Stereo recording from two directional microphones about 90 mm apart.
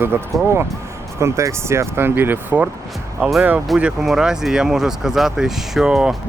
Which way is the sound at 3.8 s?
5° right (ahead or behind).